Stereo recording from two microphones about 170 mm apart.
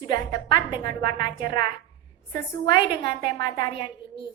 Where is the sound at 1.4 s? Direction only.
25° left (ahead or behind).